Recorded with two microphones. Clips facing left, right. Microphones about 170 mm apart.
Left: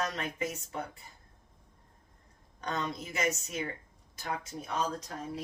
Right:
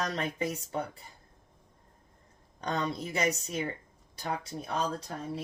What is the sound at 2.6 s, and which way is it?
Speech, 35° right (ahead or behind).